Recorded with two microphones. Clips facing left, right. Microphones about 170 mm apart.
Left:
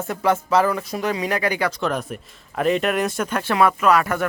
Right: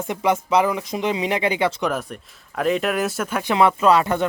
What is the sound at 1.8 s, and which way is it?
Speech, centre (ahead or behind).